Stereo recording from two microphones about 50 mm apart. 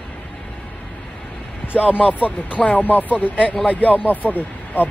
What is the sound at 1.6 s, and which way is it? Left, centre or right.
Vehicle, left.